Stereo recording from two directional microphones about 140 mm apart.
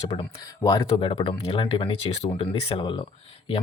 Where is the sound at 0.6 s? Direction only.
25° left (ahead or behind).